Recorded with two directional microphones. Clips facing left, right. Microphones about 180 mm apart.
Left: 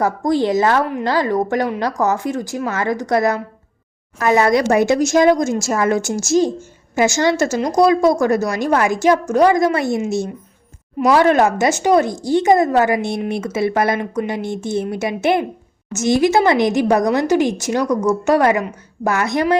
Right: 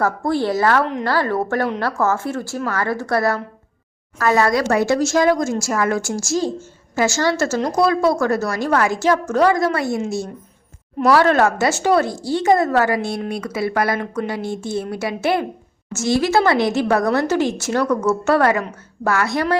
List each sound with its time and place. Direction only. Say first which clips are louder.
0.0 s a woman's voice: left 2 dB; 15° left (ahead or behind)
11.1 s a woman's voice: left 2 dB; 15° left (ahead or behind)